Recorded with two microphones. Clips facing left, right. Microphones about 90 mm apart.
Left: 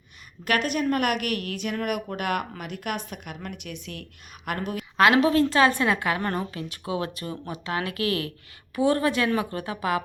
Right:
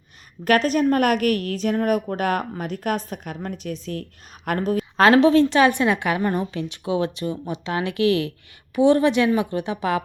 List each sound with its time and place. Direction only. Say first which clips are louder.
0.4 s a woman's voice: right 6 dB; 40° right (ahead or behind)